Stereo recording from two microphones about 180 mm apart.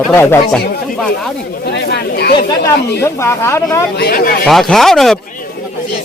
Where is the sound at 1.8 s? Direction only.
60° left (ahead or behind).